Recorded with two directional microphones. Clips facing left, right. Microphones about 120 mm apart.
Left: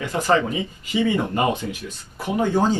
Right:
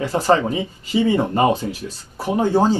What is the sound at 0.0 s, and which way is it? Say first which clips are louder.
Speech: right 3 dB; 35° right (ahead or behind).